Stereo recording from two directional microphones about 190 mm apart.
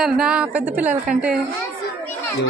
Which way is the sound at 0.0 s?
5° right (ahead or behind).